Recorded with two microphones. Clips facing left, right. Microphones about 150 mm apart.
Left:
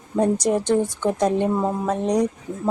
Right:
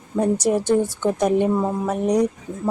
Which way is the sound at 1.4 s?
Centre (ahead or behind).